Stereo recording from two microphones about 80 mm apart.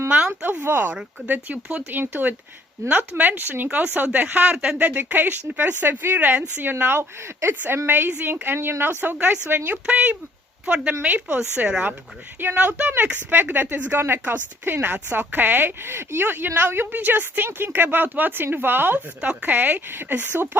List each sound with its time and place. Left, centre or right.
0.1 s a sound: centre
1.3 s speech: right
9.7 s speech: centre